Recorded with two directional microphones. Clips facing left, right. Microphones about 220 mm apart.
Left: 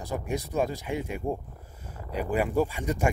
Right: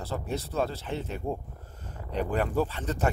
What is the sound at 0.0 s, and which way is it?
Speech, 15° left (ahead or behind).